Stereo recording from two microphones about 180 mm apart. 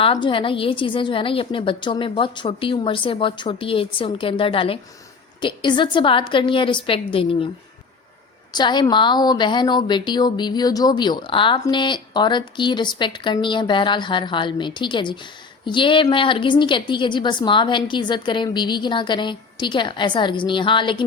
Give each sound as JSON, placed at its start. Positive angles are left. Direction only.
{"t": 0.0, "sound": "a woman's voice", "side_deg": 25}
{"t": 8.5, "sound": "a woman's voice", "side_deg": 25}